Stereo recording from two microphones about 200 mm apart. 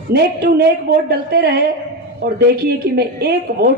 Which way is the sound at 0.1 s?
50° right (ahead or behind).